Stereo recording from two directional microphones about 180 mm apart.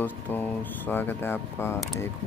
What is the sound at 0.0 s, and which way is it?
Speech, 10° left (ahead or behind).